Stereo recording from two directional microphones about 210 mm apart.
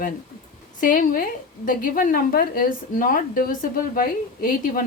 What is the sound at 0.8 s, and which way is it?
A woman's voice, 40° left (ahead or behind).